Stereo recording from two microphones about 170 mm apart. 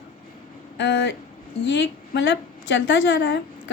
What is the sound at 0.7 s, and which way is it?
A woman's voice, 90° left.